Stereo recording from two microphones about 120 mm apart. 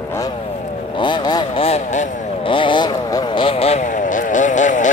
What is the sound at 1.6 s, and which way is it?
Vehicle, 75° left (ahead or behind).